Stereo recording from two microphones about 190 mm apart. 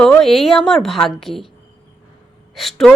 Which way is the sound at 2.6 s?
Centre (ahead or behind).